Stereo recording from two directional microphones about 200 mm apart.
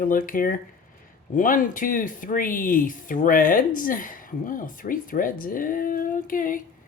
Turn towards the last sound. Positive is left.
turn(degrees=45)  # may be behind; listen again after turning